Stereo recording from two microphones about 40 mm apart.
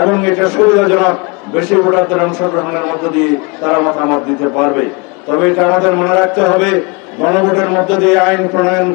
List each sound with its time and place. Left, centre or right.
0.0 s a man's voice: centre